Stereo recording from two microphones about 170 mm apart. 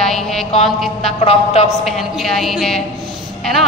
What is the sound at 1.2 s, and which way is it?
Speech, 35° left (ahead or behind).